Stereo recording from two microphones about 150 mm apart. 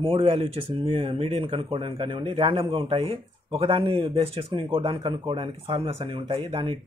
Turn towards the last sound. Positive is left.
turn(degrees=-35)  # may be behind; listen again after turning